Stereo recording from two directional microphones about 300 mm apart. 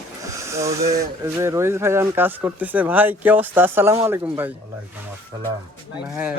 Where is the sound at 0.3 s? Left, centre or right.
Centre.